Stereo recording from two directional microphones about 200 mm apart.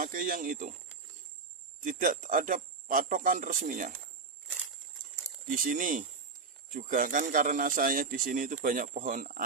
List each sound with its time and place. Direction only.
0.0 s speech: 40° right (ahead or behind)
1.8 s speech: 40° right (ahead or behind)
5.5 s speech: 40° right (ahead or behind)